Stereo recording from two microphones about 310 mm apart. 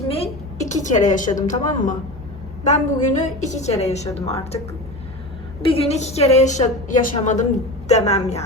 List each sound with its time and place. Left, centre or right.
0.1 s a woman's voice: left
5.6 s a woman's voice: centre